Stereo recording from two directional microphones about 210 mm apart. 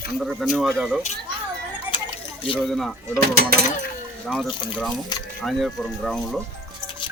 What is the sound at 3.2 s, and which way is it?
Speech, 50° right (ahead or behind).